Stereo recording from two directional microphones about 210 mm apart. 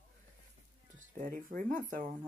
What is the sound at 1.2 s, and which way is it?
Speech, 40° right (ahead or behind).